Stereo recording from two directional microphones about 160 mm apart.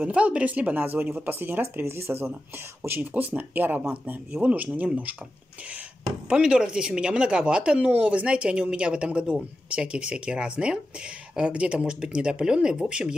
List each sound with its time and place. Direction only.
0.0 s speech: 5° right (ahead or behind)
6.2 s speech: 5° right (ahead or behind)